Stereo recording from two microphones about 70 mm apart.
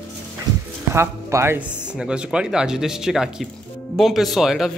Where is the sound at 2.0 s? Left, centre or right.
Centre.